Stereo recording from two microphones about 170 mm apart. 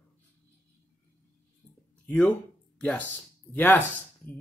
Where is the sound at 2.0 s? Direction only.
5° left (ahead or behind).